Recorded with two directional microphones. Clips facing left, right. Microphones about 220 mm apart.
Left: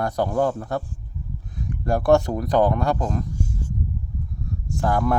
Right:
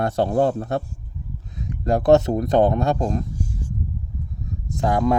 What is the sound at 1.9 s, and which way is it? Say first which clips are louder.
Speech: right 2 dB; 20° right (ahead or behind).